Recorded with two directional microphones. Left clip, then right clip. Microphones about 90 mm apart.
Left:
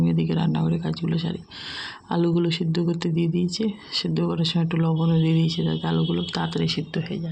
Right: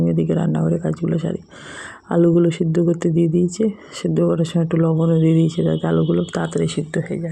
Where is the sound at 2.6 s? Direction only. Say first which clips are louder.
Right 8 dB; 55° right (ahead or behind).